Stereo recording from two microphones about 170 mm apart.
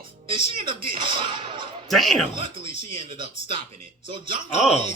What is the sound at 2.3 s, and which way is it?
Speech, 30° right (ahead or behind).